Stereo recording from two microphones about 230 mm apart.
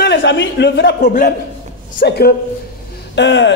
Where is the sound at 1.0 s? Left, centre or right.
Left.